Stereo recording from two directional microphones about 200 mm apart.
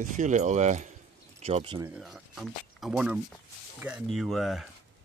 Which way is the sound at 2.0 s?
Centre (ahead or behind).